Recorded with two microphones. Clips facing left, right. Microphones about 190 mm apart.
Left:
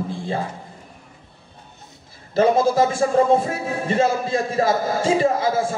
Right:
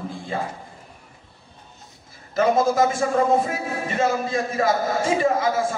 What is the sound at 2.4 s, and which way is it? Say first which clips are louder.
A man's voice: left 2 dB; 30° left (ahead or behind).